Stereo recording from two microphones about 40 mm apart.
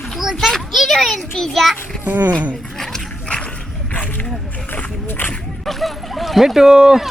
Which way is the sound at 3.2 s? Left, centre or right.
Left.